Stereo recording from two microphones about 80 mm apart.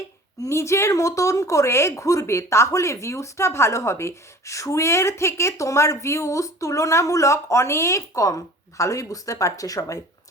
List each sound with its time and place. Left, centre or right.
0.4 s speech: left